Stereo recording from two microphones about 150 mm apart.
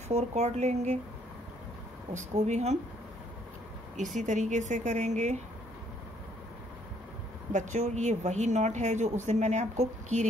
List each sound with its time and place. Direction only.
0.1 s speech: 50° right (ahead or behind)
2.1 s speech: 50° right (ahead or behind)
3.9 s speech: 55° right (ahead or behind)
7.5 s speech: 55° right (ahead or behind)